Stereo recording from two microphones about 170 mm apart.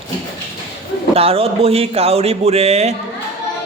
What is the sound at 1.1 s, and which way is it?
Speech, 35° right (ahead or behind).